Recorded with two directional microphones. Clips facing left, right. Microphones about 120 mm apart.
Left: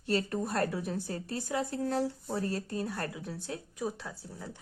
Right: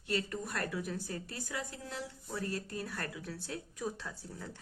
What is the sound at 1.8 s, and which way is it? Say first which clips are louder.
A woman's voice: left 12 dB; 40° left (ahead or behind).